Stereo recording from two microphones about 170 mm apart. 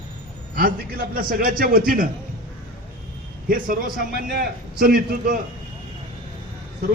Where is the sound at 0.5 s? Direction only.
60° right (ahead or behind).